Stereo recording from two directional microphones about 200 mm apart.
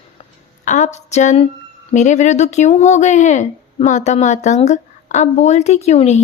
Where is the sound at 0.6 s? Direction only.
35° left (ahead or behind).